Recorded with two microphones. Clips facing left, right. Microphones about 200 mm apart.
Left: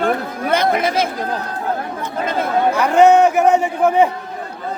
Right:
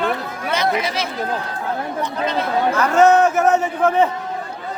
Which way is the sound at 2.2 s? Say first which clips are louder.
Left 2 dB; 50° left (ahead or behind).